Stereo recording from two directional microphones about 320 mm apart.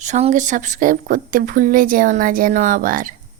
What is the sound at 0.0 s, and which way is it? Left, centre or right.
A woman's voice, right.